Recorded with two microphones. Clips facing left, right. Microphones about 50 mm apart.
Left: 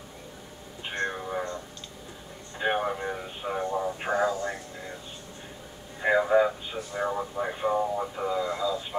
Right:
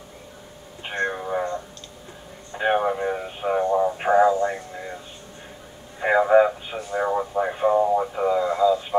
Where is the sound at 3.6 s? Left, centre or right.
Right.